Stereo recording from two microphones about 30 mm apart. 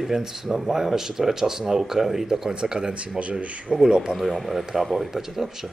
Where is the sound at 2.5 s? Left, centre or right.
Right.